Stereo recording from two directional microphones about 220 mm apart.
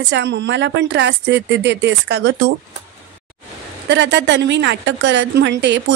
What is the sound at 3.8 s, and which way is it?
A woman's voice, 50° right (ahead or behind).